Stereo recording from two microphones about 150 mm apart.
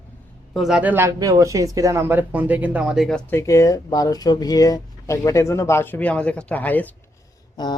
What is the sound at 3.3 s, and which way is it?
Speech, 20° left (ahead or behind).